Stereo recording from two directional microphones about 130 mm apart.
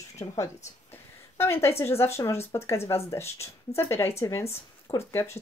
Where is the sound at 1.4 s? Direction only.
20° left (ahead or behind).